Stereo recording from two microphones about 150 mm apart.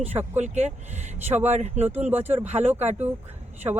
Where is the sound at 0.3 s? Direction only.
50° right (ahead or behind).